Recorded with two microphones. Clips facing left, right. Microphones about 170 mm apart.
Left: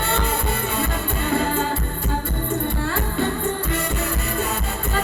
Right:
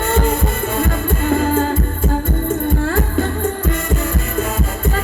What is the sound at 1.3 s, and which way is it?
Music, 45° right (ahead or behind).